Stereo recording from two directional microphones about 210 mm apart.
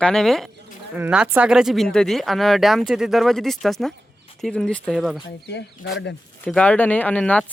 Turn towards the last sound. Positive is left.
turn(degrees=5)  # may be behind; listen again after turning